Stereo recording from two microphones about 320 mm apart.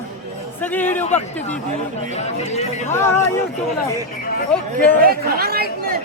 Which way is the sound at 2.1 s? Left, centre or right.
Centre.